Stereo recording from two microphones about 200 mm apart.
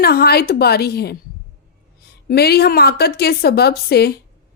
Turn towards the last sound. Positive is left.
turn(degrees=50)  # may be behind; listen again after turning